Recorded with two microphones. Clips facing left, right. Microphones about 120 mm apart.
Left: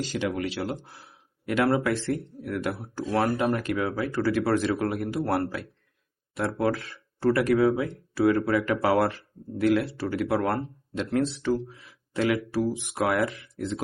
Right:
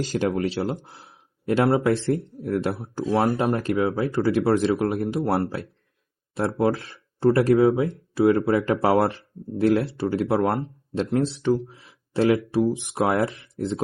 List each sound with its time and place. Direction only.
0.0 s speech: 40° right (ahead or behind)